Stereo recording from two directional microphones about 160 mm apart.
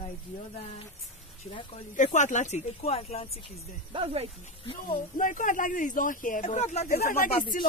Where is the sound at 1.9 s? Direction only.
50° left (ahead or behind).